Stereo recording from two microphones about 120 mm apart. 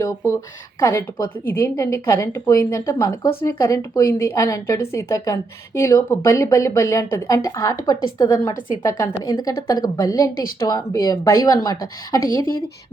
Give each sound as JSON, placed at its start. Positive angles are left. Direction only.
{"t": 0.0, "sound": "a woman's voice", "side_deg": 25}